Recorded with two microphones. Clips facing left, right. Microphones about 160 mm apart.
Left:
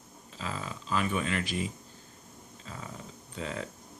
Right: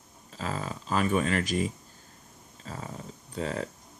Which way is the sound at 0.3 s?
45° right (ahead or behind).